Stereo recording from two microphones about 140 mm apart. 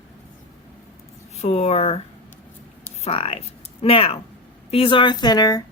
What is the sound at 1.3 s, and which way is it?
Speech, 50° left (ahead or behind).